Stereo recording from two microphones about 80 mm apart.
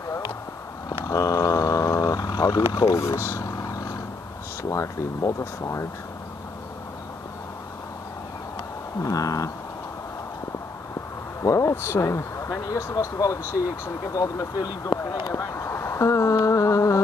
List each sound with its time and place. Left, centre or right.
1.0 s a sound: left
2.9 s speech: left
4.6 s speech: left
9.0 s speech: left
11.4 s speech: left